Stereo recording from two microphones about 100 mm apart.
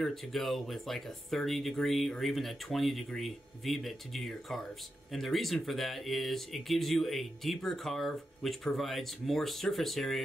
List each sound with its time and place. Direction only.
0.0 s speech: centre (ahead or behind)